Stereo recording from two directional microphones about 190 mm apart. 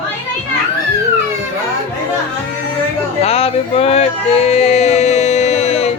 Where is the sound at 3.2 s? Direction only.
30° left (ahead or behind).